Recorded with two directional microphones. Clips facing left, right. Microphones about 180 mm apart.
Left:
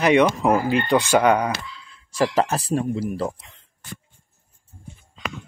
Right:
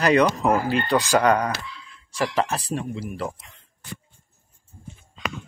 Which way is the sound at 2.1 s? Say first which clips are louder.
Left 4 dB; 40° left (ahead or behind).